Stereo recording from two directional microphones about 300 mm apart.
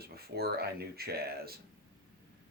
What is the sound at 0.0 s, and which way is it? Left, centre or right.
Speech, right.